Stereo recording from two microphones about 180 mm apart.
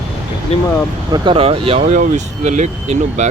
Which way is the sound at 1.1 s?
30° right (ahead or behind).